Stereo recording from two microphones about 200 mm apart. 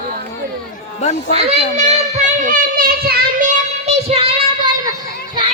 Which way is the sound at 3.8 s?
30° right (ahead or behind).